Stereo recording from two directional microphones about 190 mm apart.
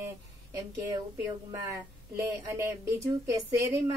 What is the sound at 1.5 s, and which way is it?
A woman's voice, 15° right (ahead or behind).